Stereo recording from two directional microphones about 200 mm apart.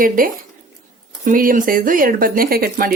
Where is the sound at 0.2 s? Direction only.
45° right (ahead or behind).